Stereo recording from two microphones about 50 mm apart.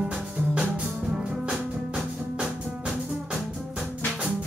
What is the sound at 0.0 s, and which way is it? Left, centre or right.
Music, centre.